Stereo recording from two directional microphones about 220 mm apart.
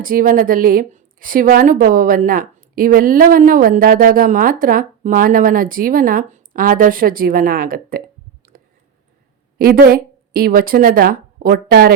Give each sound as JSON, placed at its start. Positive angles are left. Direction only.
{"t": 0.0, "sound": "a woman's voice", "side_deg": -40}
{"t": 8.5, "sound": "a sound", "side_deg": -40}
{"t": 9.6, "sound": "a woman's voice", "side_deg": -45}